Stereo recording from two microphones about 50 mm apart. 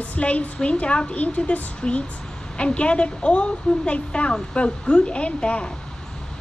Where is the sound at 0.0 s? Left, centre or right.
Left.